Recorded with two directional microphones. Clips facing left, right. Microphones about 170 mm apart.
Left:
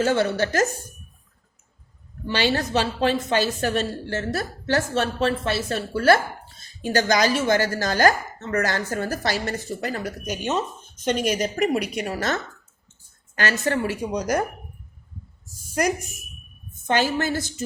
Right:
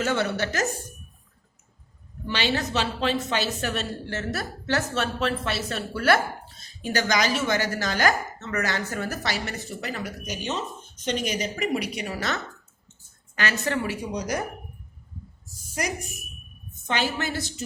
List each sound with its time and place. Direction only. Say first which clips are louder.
0.0 s a woman's voice: left 4 dB; 35° left (ahead or behind)
2.2 s speech: left 4 dB; 40° left (ahead or behind)
3.6 s a woman's voice: left 5 dB; 35° left (ahead or behind)
7.1 s speech: left 4 dB; 45° left (ahead or behind)
16.8 s speech: left 5 dB; 45° left (ahead or behind)